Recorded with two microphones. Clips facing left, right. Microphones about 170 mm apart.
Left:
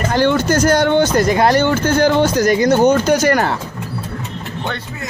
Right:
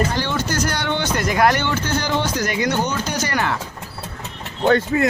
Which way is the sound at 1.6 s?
50° left (ahead or behind).